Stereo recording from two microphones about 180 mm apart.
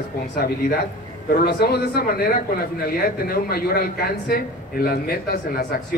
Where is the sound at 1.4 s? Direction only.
60° left (ahead or behind).